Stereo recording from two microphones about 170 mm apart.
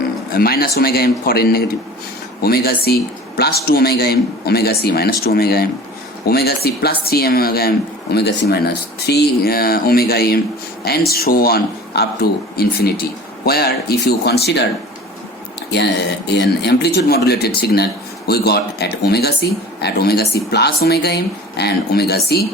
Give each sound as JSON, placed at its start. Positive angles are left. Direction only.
{"t": 0.3, "sound": "speech", "side_deg": 65}
{"t": 8.1, "sound": "speech", "side_deg": 85}
{"t": 9.0, "sound": "speech", "side_deg": 70}
{"t": 15.7, "sound": "speech", "side_deg": 80}